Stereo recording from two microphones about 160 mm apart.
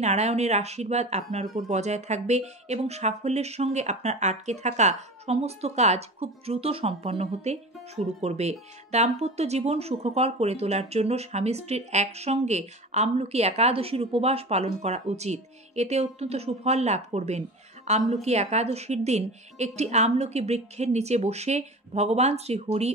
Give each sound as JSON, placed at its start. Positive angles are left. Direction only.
{"t": 0.0, "sound": "speech", "side_deg": -45}